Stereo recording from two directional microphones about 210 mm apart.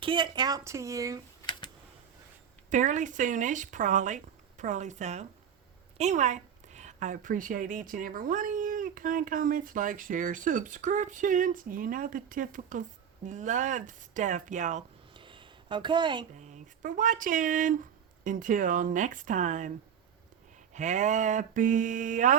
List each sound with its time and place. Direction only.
0.0 s speech: 20° right (ahead or behind)
2.6 s a woman's voice: 35° right (ahead or behind)
15.1 s a sound: 25° right (ahead or behind)
16.5 s speech: 40° right (ahead or behind)
20.7 s a woman's voice: 35° right (ahead or behind)